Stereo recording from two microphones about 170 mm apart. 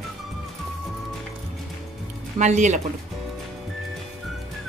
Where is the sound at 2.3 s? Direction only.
45° right (ahead or behind).